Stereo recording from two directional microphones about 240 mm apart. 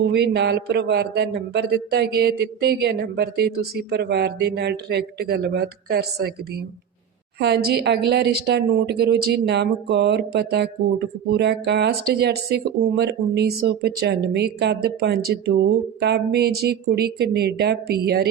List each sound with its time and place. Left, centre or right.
0.0 s a woman's voice: right
7.3 s a woman's voice: right